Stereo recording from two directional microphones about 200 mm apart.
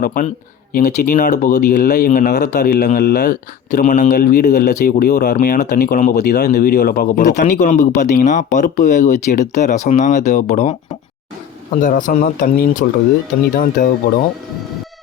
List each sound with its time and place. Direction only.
0.0 s speech: 40° left (ahead or behind)
11.8 s speech: 40° left (ahead or behind)